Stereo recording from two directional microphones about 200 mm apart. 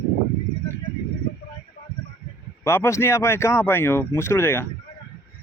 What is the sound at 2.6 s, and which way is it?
Speech, 10° left (ahead or behind).